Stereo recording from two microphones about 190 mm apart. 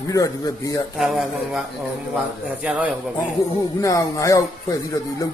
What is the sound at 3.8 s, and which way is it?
Speech, 15° left (ahead or behind).